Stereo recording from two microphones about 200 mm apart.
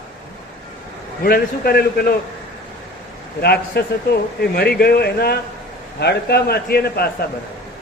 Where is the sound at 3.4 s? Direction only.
55° left (ahead or behind).